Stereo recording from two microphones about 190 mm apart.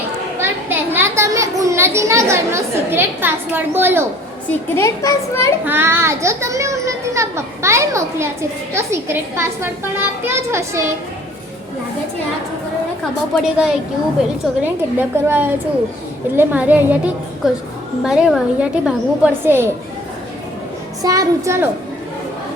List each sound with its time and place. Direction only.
0.3 s a child's voice: 10° right (ahead or behind)
4.4 s a child's voice: 15° left (ahead or behind)
5.6 s a child's voice: 10° right (ahead or behind)
13.3 s a woman's voice: 5° right (ahead or behind)
18.0 s a woman's voice: 5° right (ahead or behind)
21.0 s a child's voice: 20° right (ahead or behind)